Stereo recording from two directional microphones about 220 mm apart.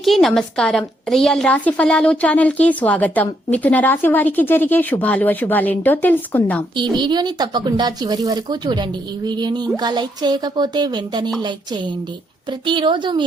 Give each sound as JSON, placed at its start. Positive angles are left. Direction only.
{"t": 0.0, "sound": "a woman's voice", "side_deg": 0}
{"t": 6.9, "sound": "speech", "side_deg": -20}
{"t": 12.5, "sound": "speech", "side_deg": -20}